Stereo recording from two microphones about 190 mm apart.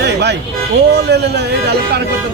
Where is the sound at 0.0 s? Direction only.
60° right (ahead or behind).